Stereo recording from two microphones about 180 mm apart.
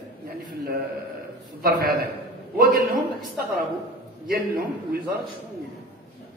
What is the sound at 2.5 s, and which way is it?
Speech, 50° right (ahead or behind).